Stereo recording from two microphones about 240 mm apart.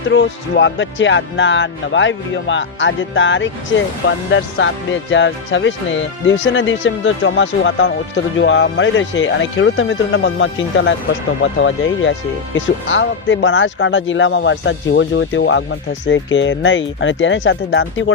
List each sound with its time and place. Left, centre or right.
0.1 s speech: left